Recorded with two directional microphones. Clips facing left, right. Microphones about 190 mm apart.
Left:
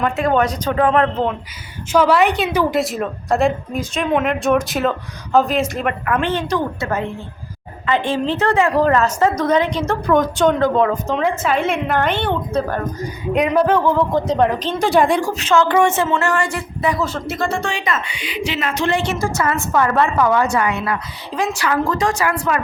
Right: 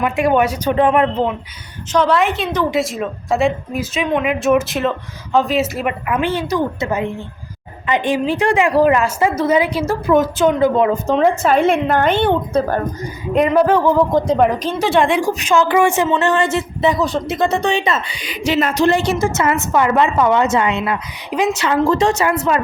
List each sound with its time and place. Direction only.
0.0 s a woman's voice: 10° right (ahead or behind)
1.9 s a woman's voice: 5° left (ahead or behind)
11.0 s a woman's voice: 40° right (ahead or behind)
13.3 s a woman's voice: centre (ahead or behind)
15.2 s speech: 15° right (ahead or behind)
18.2 s a woman's voice: 40° right (ahead or behind)
19.2 s speech: 25° right (ahead or behind)